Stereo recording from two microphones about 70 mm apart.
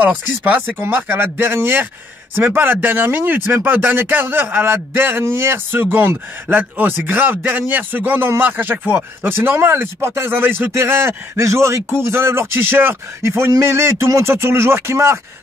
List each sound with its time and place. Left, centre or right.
0.0 s speech: right
10.7 s speech: right
13.2 s speech: right